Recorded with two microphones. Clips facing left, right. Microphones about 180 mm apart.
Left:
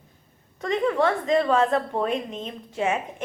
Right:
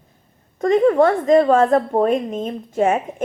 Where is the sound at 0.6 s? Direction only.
45° right (ahead or behind).